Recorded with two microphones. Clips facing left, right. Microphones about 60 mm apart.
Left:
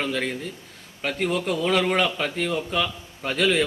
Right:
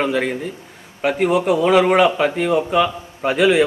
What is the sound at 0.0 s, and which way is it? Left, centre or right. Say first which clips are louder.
A man's voice: right 7 dB; centre.